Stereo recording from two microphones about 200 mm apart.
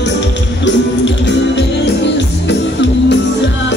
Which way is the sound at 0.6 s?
65° left (ahead or behind).